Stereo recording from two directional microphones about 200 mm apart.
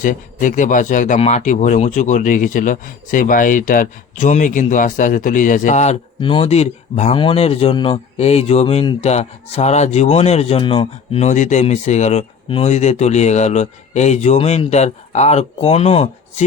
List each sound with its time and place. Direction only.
0.0 s speech: 40° left (ahead or behind)
6.1 s speech: 25° left (ahead or behind)